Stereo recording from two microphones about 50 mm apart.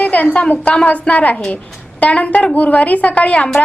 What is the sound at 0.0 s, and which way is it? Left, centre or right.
A woman's voice, left.